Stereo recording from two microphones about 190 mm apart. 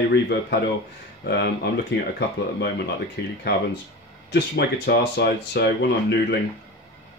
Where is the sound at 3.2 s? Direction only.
60° left (ahead or behind).